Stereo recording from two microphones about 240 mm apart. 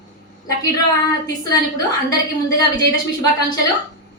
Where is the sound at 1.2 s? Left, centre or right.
Centre.